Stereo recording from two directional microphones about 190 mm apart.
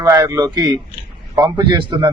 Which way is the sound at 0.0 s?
20° right (ahead or behind).